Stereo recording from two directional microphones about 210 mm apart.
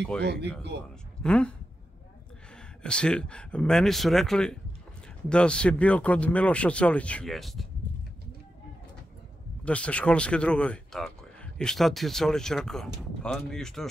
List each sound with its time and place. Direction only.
0.2 s speech: 55° right (ahead or behind)
1.2 s speech: 5° left (ahead or behind)
2.8 s speech: 5° left (ahead or behind)
9.7 s speech: 5° left (ahead or behind)